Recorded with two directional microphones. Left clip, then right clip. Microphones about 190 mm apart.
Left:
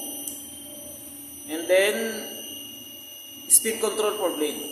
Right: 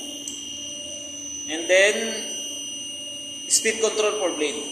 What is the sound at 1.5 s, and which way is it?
Speech, 25° left (ahead or behind).